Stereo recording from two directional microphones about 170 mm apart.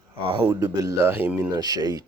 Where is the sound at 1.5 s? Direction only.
20° right (ahead or behind).